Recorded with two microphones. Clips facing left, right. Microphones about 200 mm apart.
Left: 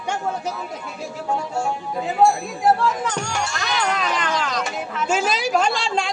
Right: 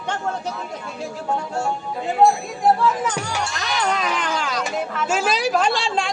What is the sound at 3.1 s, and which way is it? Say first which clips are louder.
Speech: even; 5° right (ahead or behind).